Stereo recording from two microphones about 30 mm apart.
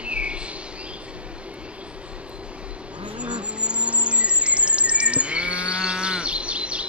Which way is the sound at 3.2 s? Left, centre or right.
Right.